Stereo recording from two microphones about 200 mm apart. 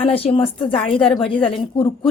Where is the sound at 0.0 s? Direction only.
30° left (ahead or behind).